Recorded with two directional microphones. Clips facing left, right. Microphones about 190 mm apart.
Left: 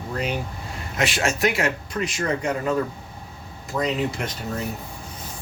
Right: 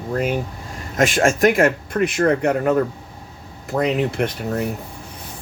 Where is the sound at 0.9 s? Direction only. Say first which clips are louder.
Right 7 dB; 50° right (ahead or behind).